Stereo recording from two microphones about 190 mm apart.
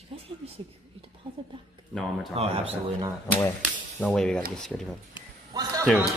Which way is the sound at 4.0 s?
Centre (ahead or behind).